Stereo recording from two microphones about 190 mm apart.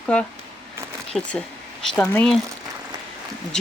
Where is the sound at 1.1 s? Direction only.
5° right (ahead or behind).